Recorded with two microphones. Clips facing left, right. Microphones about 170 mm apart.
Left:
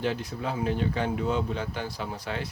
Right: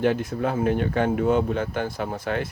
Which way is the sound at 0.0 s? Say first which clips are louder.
Right 7 dB; 50° right (ahead or behind).